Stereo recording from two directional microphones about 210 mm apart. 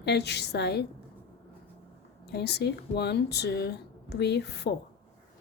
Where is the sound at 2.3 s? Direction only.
50° left (ahead or behind).